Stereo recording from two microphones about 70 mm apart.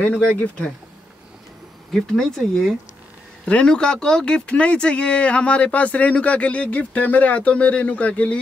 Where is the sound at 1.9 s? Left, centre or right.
Centre.